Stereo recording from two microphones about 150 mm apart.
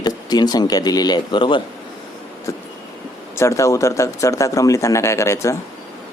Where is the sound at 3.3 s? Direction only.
20° left (ahead or behind).